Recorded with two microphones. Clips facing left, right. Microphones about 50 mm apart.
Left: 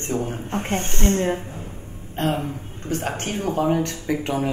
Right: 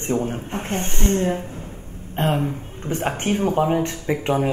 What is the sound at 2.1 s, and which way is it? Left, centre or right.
Speech, centre.